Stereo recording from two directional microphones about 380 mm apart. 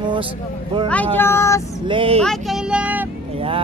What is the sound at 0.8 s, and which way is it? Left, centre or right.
Speech, centre.